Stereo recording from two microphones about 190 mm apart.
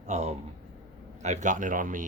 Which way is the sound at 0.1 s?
35° right (ahead or behind).